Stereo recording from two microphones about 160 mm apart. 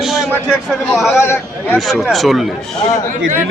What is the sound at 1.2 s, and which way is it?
Speech, 15° left (ahead or behind).